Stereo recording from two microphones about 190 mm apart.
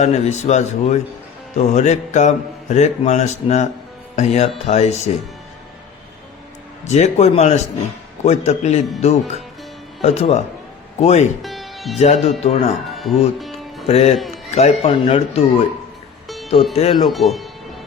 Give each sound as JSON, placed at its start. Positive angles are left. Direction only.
{"t": 0.0, "sound": "speech", "side_deg": 35}
{"t": 6.8, "sound": "speech", "side_deg": 35}
{"t": 11.4, "sound": "music", "side_deg": 0}
{"t": 11.9, "sound": "speech", "side_deg": 35}
{"t": 12.9, "sound": "music", "side_deg": 0}
{"t": 13.8, "sound": "speech", "side_deg": 35}
{"t": 16.7, "sound": "speech", "side_deg": 30}
{"t": 17.1, "sound": "speech", "side_deg": 0}